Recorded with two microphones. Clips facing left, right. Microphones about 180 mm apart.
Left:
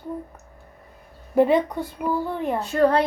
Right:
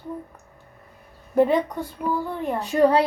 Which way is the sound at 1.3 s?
10° left (ahead or behind).